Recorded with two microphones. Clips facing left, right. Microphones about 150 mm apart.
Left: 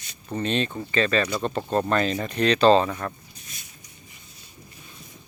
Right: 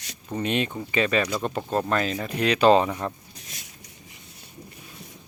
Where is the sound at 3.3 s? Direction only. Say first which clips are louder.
Right 2 dB; 90° right.